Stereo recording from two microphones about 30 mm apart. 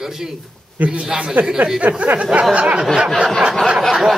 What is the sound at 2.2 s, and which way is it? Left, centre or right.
Speech, right.